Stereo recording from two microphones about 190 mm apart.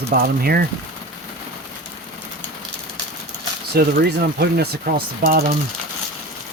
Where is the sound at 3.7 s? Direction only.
55° right (ahead or behind).